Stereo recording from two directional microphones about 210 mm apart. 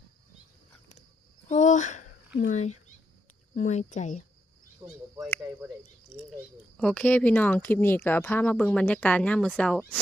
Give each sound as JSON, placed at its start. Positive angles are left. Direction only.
{"t": 1.5, "sound": "a sound", "side_deg": 35}
{"t": 2.4, "sound": "speech", "side_deg": 35}
{"t": 4.8, "sound": "speech", "side_deg": -20}
{"t": 5.4, "sound": "speech", "side_deg": -10}
{"t": 6.7, "sound": "speech", "side_deg": 5}